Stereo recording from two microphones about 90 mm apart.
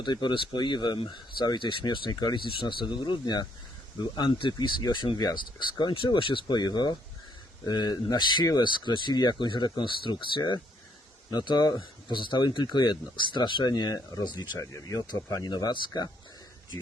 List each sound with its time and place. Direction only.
0.0 s speech: 55° left (ahead or behind)
14.6 s speech: 35° left (ahead or behind)
15.5 s speech: 60° left (ahead or behind)